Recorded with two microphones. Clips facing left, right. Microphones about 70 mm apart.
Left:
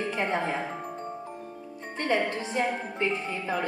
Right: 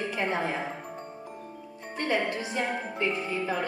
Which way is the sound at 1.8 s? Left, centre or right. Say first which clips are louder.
Left 1 dB; left.